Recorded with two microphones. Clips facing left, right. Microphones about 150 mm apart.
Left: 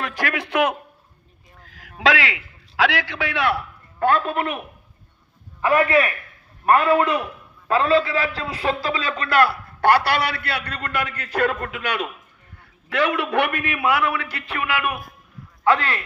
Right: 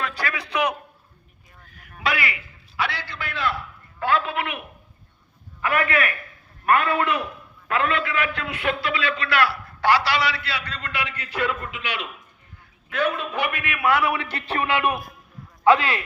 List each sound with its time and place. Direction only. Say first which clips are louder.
0.3 s a man's voice: left 4 dB; 55° left (ahead or behind)
1.6 s a man's voice: left 7 dB; 90° left
4.0 s a man's voice: left 4 dB; 50° left (ahead or behind)
5.6 s a man's voice: left 5 dB; 30° left (ahead or behind); by 12.0 s 50° left (ahead or behind)
12.9 s a man's voice: left 4 dB; 90° left; by 13.5 s 75° left (ahead or behind)
13.5 s a man's voice: left 4 dB; 40° left (ahead or behind)
14.0 s speech: even; 20° right (ahead or behind)
15.6 s speech: right 2 dB; 15° right (ahead or behind)